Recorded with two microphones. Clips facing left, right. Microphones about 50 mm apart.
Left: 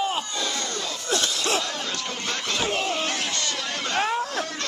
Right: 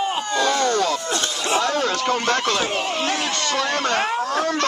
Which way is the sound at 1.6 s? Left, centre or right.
Right.